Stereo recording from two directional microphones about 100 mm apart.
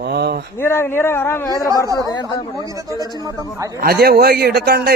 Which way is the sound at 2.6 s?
35° right (ahead or behind).